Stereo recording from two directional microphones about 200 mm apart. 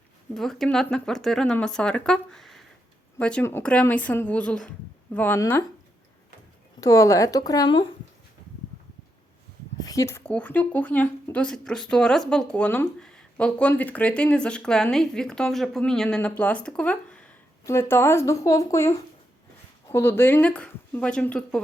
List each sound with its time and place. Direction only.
0.3 s speech: centre (ahead or behind)
6.7 s speech: 15° left (ahead or behind)
9.7 s a sound: 20° left (ahead or behind)
10.3 s speech: 10° left (ahead or behind)